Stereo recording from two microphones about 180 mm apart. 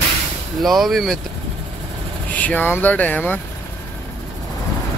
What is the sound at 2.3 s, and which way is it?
Speech, 10° left (ahead or behind).